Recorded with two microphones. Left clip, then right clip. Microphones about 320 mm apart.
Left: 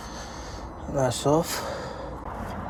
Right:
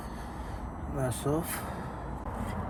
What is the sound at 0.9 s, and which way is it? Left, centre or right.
Speech, centre.